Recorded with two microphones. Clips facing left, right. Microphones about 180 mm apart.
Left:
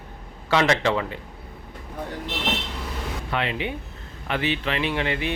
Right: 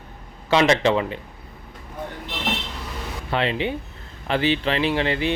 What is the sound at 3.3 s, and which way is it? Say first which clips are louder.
Speech: right 5 dB; 30° right (ahead or behind).